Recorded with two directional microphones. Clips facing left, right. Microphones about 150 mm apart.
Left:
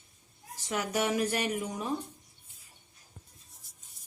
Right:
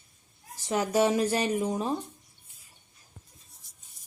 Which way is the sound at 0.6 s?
30° right (ahead or behind).